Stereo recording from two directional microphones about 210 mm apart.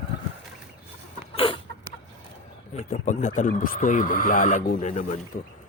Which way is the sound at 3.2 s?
35° left (ahead or behind).